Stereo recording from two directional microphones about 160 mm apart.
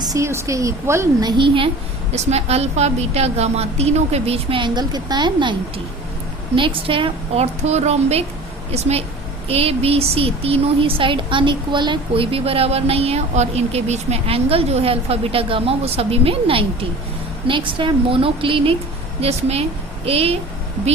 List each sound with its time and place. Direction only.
0.0 s a woman's voice: 20° right (ahead or behind); by 20.4 s 40° right (ahead or behind)